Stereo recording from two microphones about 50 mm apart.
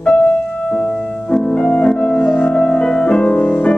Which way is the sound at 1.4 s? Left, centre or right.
Left.